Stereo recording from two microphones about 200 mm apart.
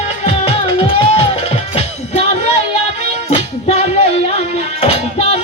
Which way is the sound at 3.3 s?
30° left (ahead or behind).